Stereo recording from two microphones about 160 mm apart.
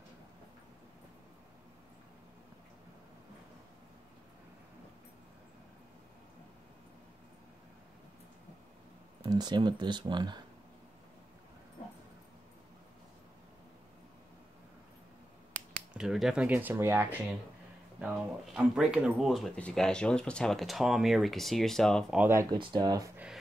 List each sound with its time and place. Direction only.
9.2 s speech: 25° right (ahead or behind)
15.9 s speech: centre (ahead or behind)
22.2 s speech: 15° right (ahead or behind)
22.6 s speech: 30° right (ahead or behind)